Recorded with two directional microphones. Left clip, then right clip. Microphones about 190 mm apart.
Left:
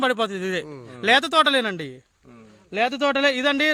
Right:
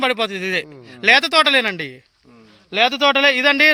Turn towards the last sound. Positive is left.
turn(degrees=-10)  # may be behind; listen again after turning